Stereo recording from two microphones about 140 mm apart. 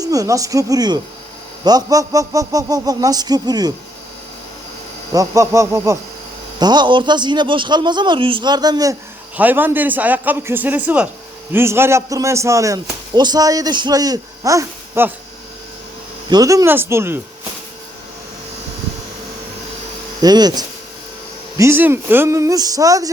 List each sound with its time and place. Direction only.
0.0 s a man's voice: 25° right (ahead or behind)
5.1 s a man's voice: 25° right (ahead or behind)
6.6 s a man's voice: 30° right (ahead or behind)
9.4 s a man's voice: 15° right (ahead or behind)
16.3 s a man's voice: 25° right (ahead or behind)
20.2 s a man's voice: 30° right (ahead or behind)
21.6 s a man's voice: 15° right (ahead or behind)